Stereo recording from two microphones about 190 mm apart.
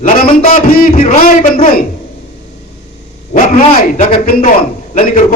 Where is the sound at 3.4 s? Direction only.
35° left (ahead or behind).